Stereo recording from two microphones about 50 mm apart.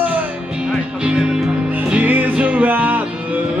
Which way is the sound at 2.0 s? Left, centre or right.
Right.